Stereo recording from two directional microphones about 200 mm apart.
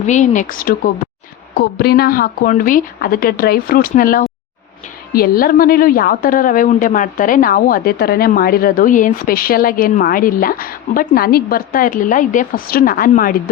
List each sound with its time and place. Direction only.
0.1 s a woman's voice: 40° left (ahead or behind)